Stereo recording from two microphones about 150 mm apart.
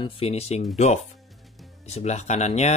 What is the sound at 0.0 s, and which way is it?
Speech, 40° left (ahead or behind).